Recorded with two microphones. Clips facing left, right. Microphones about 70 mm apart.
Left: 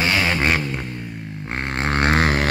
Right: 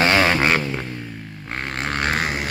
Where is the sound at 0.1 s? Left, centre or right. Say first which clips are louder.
Right 3 dB; centre.